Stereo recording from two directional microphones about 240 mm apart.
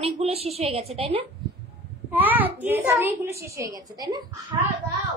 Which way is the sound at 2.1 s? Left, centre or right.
Centre.